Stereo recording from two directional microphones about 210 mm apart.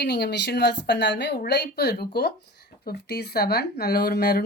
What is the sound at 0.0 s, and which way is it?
Speech, 50° left (ahead or behind).